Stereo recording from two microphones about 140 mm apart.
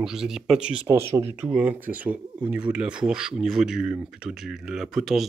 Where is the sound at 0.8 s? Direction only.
15° right (ahead or behind).